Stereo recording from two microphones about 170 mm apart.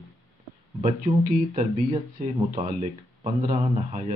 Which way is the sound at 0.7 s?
45° right (ahead or behind).